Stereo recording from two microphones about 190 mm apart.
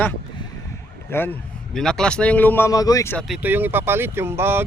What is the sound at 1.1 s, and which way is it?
A man's voice, 10° left (ahead or behind).